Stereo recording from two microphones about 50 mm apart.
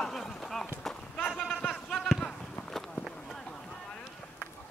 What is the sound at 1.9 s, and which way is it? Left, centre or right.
Clip-clop, centre.